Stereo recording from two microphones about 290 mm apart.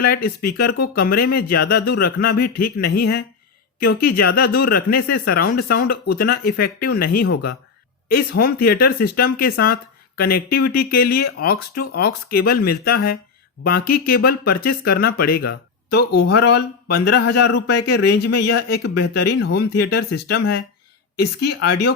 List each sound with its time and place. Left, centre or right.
0.0 s speech: left